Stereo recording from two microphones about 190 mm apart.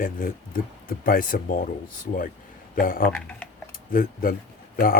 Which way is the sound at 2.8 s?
50° left (ahead or behind).